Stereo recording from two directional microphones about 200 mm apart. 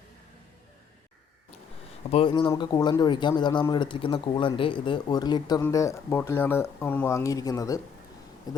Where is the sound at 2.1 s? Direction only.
25° left (ahead or behind).